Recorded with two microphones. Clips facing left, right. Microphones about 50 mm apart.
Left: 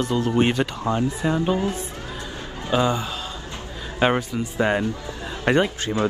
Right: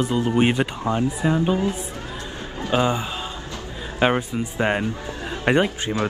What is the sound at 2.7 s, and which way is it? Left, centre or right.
Speech, right.